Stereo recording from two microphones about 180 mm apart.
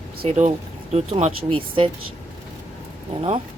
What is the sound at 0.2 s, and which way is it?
Speech, 40° right (ahead or behind).